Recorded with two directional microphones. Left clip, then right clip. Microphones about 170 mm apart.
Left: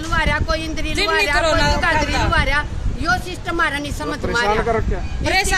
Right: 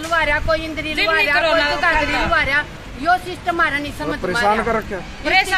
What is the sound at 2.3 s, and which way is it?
Speech, 30° left (ahead or behind).